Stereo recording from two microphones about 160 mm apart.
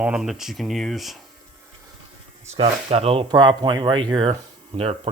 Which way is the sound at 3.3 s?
30° right (ahead or behind).